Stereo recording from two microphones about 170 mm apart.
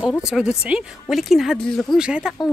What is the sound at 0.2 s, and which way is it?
Speech, 5° right (ahead or behind).